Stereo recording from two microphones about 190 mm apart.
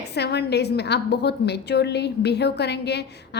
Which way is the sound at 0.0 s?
60° left (ahead or behind).